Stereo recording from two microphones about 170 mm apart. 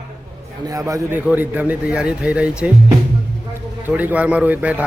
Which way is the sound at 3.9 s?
10° right (ahead or behind).